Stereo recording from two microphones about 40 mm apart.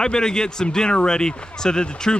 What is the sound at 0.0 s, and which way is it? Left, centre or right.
Speech, centre.